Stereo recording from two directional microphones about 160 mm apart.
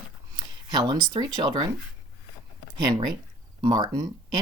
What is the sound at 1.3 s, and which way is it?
Speech, 30° right (ahead or behind).